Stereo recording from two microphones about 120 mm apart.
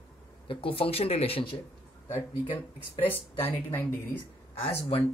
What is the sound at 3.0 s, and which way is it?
Speech, 15° left (ahead or behind).